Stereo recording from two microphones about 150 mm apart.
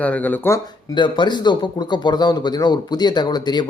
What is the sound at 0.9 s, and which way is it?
A man's voice, 30° left (ahead or behind).